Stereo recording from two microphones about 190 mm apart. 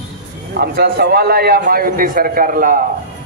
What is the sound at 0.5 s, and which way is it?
Speech, 55° right (ahead or behind).